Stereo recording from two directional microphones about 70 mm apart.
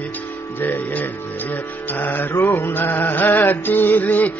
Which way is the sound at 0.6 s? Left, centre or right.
Left.